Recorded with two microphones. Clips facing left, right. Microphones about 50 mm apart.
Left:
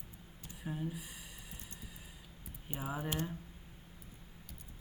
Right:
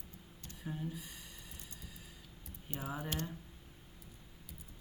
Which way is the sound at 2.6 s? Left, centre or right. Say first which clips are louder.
Left 2 dB; centre.